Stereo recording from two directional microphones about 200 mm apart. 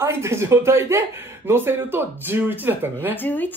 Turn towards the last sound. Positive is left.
turn(degrees=10)  # may be behind; listen again after turning